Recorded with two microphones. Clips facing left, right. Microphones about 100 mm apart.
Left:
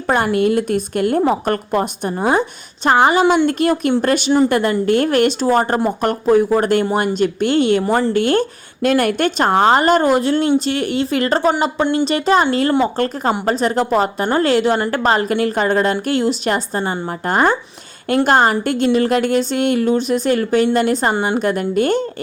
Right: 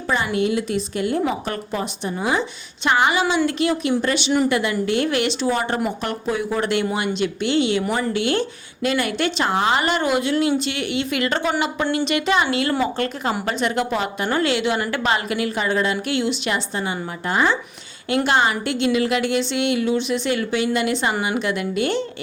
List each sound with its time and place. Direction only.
0.3 s a woman's voice: 50° left (ahead or behind)